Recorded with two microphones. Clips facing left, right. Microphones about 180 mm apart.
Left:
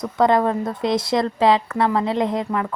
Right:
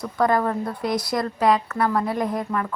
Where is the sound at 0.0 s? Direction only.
20° left (ahead or behind).